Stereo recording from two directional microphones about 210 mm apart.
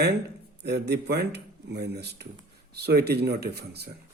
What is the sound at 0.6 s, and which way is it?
A man's voice, 50° right (ahead or behind).